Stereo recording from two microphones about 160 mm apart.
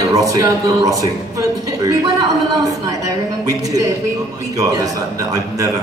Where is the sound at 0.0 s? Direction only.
20° right (ahead or behind).